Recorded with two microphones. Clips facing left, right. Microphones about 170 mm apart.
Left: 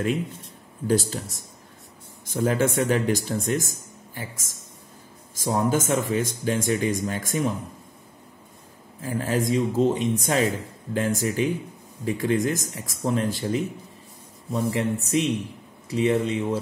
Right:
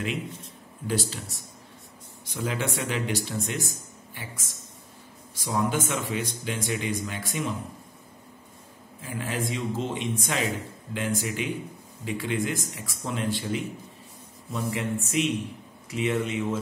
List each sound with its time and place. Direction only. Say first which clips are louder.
0.8 s speech: left 6 dB; 45° left (ahead or behind)
9.0 s speech: left 6 dB; 40° left (ahead or behind)